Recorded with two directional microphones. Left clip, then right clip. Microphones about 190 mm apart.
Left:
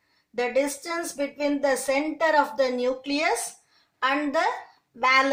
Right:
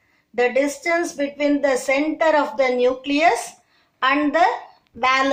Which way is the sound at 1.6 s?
50° left (ahead or behind).